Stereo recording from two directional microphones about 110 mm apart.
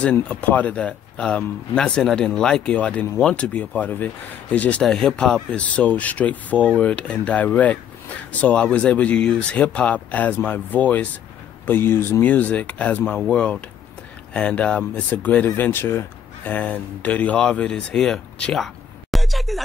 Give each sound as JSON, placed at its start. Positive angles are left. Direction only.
{"t": 0.0, "sound": "speech", "side_deg": 15}